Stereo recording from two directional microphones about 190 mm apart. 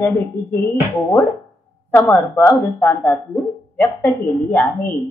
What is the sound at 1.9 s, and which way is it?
A woman's voice, 10° left (ahead or behind).